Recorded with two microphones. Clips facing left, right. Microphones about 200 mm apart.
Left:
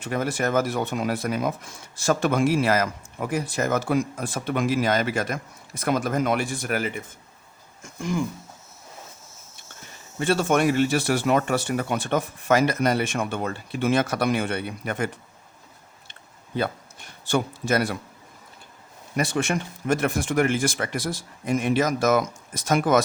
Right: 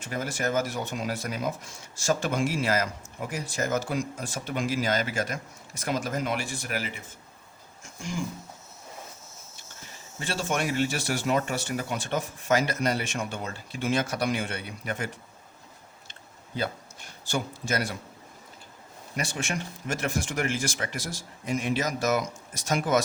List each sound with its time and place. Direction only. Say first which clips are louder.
0.0 s speech: left 5 dB; 60° left (ahead or behind)
10.2 s speech: left 8 dB; 60° left (ahead or behind)
17.2 s speech: left 7 dB; 60° left (ahead or behind)
19.3 s speech: left 7 dB; 60° left (ahead or behind)